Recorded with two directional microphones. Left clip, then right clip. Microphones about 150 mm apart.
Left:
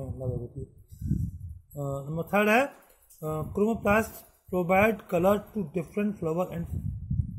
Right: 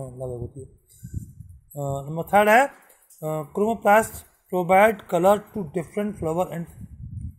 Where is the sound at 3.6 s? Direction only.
20° right (ahead or behind).